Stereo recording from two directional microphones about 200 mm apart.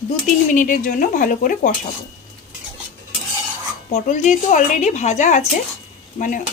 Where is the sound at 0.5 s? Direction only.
40° left (ahead or behind).